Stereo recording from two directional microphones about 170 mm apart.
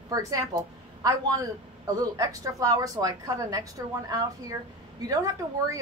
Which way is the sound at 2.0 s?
20° right (ahead or behind).